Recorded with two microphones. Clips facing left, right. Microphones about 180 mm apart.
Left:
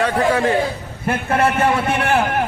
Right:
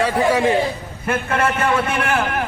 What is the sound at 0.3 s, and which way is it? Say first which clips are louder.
Speech: right 1 dB; 15° right (ahead or behind).